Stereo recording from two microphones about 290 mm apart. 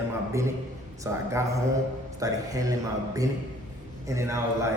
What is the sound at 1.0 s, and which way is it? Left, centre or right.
A man's voice, centre.